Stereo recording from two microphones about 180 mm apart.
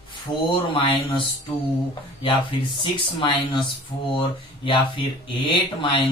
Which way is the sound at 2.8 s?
25° left (ahead or behind).